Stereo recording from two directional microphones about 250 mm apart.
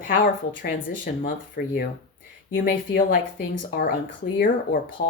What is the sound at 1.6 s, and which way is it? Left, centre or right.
Speech, left.